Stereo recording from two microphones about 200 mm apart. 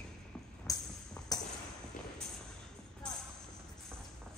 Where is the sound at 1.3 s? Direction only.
20° left (ahead or behind).